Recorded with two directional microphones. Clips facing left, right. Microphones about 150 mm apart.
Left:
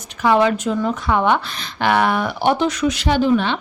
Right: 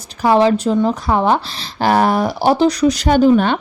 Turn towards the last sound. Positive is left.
turn(degrees=-45)  # may be behind; listen again after turning